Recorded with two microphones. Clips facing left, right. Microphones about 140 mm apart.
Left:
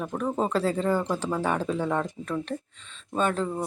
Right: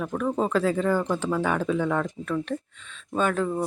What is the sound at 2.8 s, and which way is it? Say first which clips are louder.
Speech: right 3 dB; 30° left (ahead or behind).